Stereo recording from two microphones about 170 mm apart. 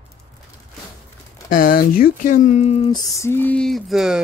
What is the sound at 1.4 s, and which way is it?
Speech, 55° left (ahead or behind).